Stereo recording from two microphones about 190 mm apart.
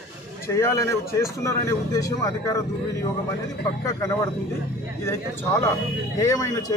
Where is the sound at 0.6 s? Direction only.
15° left (ahead or behind).